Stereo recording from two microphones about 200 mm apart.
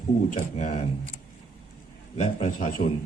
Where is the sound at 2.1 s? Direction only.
40° left (ahead or behind).